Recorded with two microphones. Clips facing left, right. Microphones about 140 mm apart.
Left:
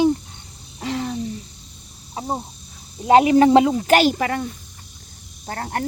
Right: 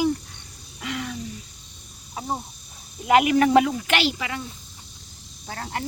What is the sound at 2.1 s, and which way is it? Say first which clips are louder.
Speech: left 3 dB; 25° left (ahead or behind).